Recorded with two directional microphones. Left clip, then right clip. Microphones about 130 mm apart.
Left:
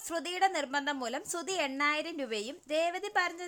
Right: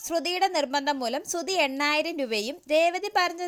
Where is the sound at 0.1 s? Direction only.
20° right (ahead or behind).